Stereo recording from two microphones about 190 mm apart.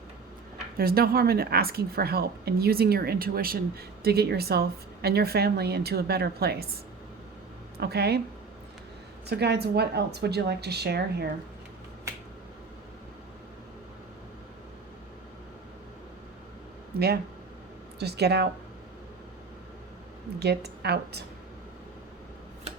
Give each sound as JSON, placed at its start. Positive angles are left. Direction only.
{"t": 0.8, "sound": "a woman's voice", "side_deg": -50}
{"t": 7.8, "sound": "a woman's voice", "side_deg": -60}
{"t": 9.2, "sound": "a woman's voice", "side_deg": -60}
{"t": 18.0, "sound": "a woman's voice", "side_deg": -60}
{"t": 20.4, "sound": "a woman's voice", "side_deg": -60}